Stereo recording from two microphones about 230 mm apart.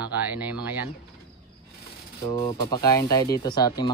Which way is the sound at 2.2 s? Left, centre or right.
Centre.